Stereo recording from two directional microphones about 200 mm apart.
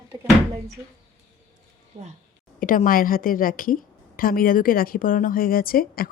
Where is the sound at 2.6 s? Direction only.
45° left (ahead or behind).